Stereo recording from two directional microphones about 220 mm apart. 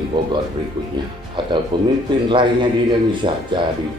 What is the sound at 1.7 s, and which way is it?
Speech, 20° right (ahead or behind).